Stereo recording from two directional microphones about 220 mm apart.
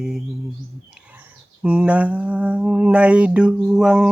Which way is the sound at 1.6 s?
5° right (ahead or behind).